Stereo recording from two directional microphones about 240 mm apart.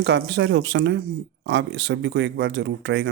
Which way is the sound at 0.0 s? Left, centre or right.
Right.